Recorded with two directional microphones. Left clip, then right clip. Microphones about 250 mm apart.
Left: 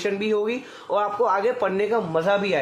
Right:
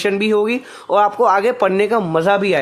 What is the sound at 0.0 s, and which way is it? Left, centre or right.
Speech, right.